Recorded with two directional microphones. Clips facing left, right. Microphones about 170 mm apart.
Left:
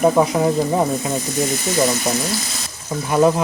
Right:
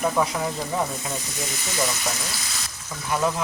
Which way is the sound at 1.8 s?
40° left (ahead or behind).